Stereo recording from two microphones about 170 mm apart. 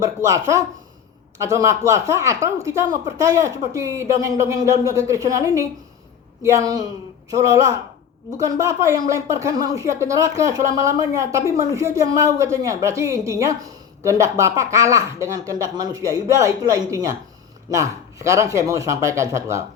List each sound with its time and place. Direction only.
0.2 s speech: 20° right (ahead or behind)